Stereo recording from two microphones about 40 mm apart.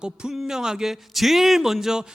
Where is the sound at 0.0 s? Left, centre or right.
Right.